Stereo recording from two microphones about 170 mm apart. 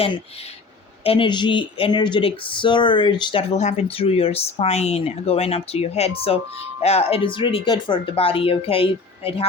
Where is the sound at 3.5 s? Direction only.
40° left (ahead or behind).